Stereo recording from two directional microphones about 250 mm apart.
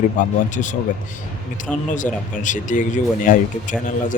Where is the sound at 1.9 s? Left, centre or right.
Left.